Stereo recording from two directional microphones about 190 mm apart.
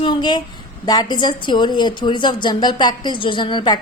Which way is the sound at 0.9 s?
20° left (ahead or behind).